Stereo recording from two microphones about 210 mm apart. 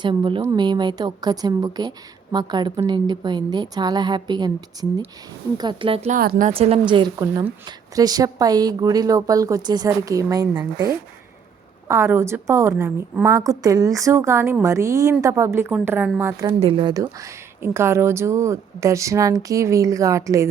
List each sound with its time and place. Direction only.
0.0 s a woman's voice: 20° right (ahead or behind)
6.1 s speech: 45° right (ahead or behind)
6.5 s a woman's voice: 25° right (ahead or behind)
16.6 s a woman's voice: 25° right (ahead or behind)